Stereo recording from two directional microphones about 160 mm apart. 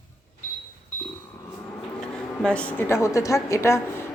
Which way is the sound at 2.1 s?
5° left (ahead or behind).